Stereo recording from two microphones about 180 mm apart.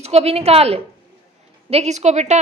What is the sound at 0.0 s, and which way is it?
A woman's voice, 35° right (ahead or behind).